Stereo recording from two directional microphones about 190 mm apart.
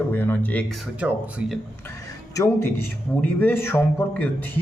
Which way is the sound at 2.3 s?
15° left (ahead or behind).